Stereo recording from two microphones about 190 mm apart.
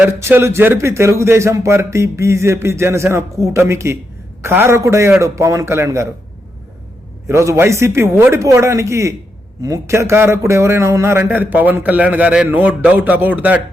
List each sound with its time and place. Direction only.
0.0 s speech: 15° right (ahead or behind)
7.3 s speech: 15° right (ahead or behind)